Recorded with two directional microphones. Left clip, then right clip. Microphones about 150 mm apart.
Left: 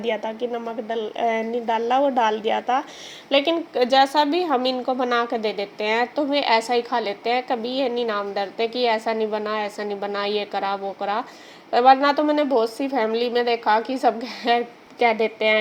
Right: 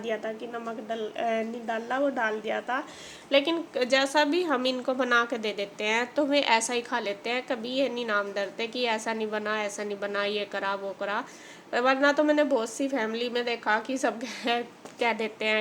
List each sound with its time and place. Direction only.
0.0 s a woman's voice: 20° left (ahead or behind)